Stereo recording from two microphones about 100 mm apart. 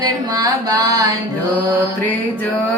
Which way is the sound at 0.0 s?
40° right (ahead or behind).